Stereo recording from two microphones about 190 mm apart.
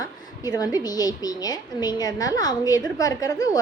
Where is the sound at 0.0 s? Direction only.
20° left (ahead or behind).